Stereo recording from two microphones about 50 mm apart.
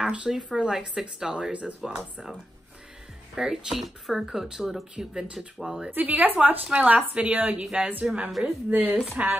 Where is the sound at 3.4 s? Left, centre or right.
Centre.